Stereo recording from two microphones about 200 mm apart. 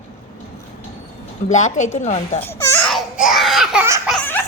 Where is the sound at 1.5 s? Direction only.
35° left (ahead or behind).